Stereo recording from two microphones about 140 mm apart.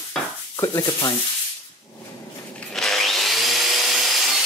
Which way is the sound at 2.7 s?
Centre (ahead or behind).